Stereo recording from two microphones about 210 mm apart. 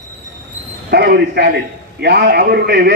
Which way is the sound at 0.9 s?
50° right (ahead or behind).